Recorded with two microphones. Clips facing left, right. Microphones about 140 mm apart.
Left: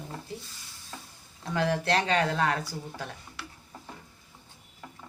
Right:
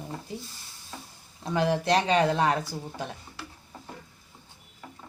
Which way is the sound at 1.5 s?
20° right (ahead or behind).